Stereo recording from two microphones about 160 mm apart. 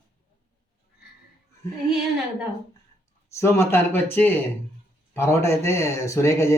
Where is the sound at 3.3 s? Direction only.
15° left (ahead or behind).